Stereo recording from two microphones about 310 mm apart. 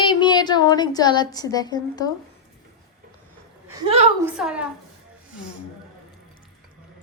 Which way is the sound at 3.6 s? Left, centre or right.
Centre.